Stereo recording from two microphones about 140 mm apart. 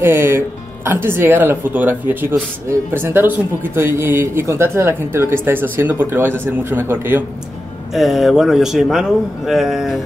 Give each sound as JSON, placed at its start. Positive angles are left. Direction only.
{"t": 0.0, "sound": "speech", "side_deg": -15}
{"t": 7.9, "sound": "a man's voice", "side_deg": 0}